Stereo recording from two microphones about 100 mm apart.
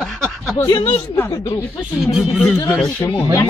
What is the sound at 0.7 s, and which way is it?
Speech, 75° left (ahead or behind).